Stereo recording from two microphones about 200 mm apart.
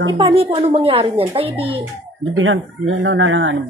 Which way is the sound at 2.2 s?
75° right (ahead or behind).